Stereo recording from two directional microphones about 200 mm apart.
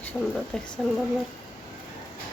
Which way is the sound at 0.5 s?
5° left (ahead or behind).